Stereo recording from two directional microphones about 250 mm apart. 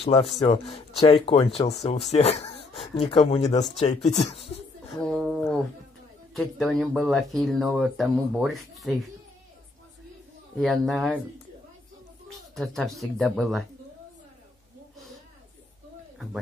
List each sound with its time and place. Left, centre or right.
0.0 s speech: left
5.0 s a sound: centre
6.3 s speech: centre
10.6 s speech: centre
12.3 s speech: centre